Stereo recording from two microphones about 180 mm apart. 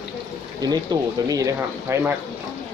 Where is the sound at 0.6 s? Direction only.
20° right (ahead or behind).